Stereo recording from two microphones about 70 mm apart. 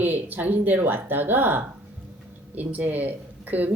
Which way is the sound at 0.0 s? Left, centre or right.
Right.